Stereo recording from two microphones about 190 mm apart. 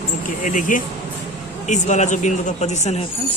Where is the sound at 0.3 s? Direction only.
45° left (ahead or behind).